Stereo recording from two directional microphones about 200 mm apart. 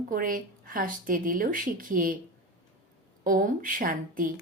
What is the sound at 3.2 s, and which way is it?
Speech, 45° right (ahead or behind).